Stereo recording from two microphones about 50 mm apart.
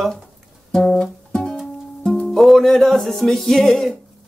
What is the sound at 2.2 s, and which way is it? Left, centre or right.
Music, centre.